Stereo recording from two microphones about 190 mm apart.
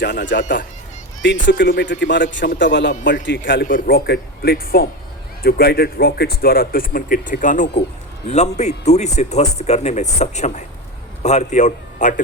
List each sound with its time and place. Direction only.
0.0 s speech: 65° left (ahead or behind)
3.6 s a man's voice: 45° left (ahead or behind)